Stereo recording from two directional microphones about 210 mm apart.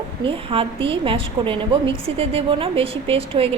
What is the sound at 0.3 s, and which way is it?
A woman's voice, 25° right (ahead or behind).